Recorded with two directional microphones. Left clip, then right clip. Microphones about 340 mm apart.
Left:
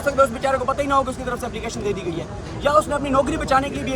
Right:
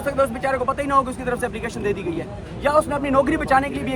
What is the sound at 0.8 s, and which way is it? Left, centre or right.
Speech, right.